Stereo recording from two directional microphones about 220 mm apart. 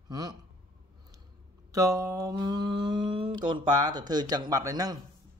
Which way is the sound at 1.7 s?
15° right (ahead or behind).